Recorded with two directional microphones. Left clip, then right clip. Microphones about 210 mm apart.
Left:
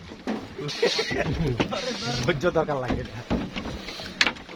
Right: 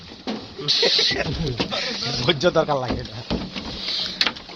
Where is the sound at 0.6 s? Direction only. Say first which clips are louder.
Right 7 dB; centre (ahead or behind).